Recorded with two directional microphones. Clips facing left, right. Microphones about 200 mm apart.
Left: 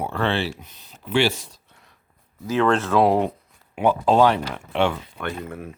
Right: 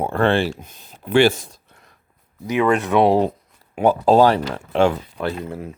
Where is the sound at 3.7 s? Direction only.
40° right (ahead or behind).